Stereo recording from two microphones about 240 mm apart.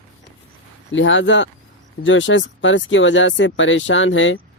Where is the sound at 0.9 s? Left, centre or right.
Left.